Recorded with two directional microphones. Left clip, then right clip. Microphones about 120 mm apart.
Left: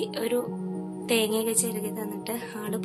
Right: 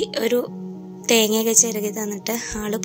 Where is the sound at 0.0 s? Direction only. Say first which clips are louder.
Right 7 dB; 45° right (ahead or behind).